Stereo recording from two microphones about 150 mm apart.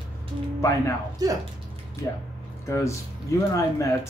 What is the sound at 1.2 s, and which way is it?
Speech, 25° right (ahead or behind).